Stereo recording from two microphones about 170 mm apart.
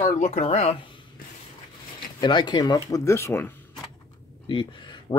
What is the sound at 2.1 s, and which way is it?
Speech, 25° left (ahead or behind).